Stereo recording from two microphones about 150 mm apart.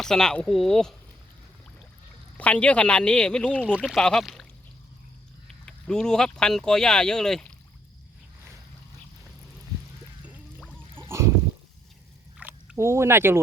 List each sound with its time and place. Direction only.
0.0 s speech: 5° left (ahead or behind)
2.4 s speech: 10° left (ahead or behind)
5.6 s speech: 5° left (ahead or behind)
12.4 s speech: 10° right (ahead or behind)